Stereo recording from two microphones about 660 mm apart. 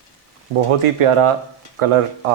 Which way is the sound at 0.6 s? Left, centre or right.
Right.